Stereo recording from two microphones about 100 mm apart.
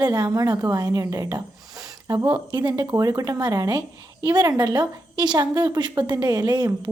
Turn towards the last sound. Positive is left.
turn(degrees=-45)  # may be behind; listen again after turning